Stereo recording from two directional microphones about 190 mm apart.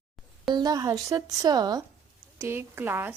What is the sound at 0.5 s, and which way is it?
A woman's voice, 20° right (ahead or behind).